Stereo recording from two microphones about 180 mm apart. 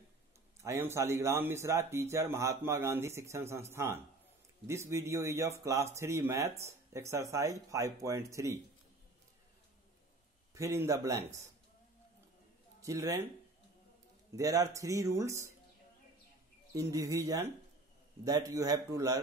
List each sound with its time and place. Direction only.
0.6 s speech: 15° right (ahead or behind)
10.5 s speech: 15° right (ahead or behind)
12.8 s speech: 15° right (ahead or behind)
14.3 s a man's voice: 20° right (ahead or behind)
16.7 s a man's voice: 20° right (ahead or behind)